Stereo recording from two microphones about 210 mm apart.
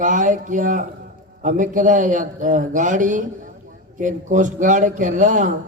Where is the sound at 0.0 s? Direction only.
35° right (ahead or behind).